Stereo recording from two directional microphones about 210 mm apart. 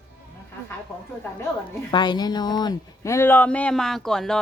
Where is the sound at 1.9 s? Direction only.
20° left (ahead or behind).